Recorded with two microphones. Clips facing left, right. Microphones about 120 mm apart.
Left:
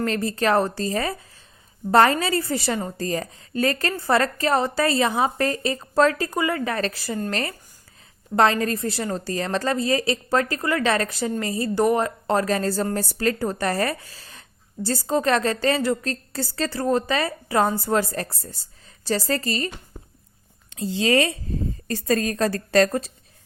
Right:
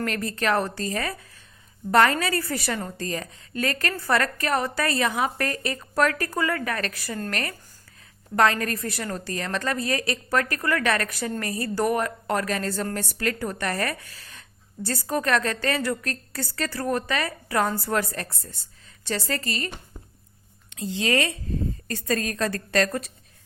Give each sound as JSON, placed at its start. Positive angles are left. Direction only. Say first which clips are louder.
{"t": 0.0, "sound": "a woman's voice", "louder": "left 4 dB", "side_deg": 30}